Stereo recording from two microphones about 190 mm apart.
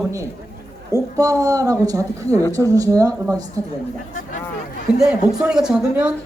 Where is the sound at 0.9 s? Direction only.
20° right (ahead or behind).